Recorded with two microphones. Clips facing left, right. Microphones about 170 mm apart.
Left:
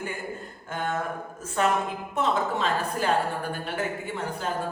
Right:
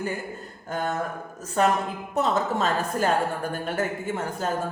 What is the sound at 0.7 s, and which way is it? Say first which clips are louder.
Speech: right 2 dB; 40° right (ahead or behind).